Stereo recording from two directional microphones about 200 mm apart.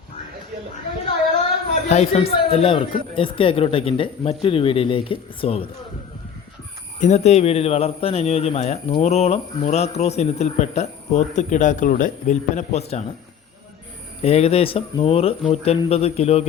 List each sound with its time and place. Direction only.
1.9 s speech: 30° left (ahead or behind)
7.0 s a man's voice: 35° left (ahead or behind)
14.2 s a man's voice: 30° left (ahead or behind)